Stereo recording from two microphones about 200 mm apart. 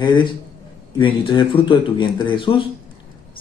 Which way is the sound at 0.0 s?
25° left (ahead or behind).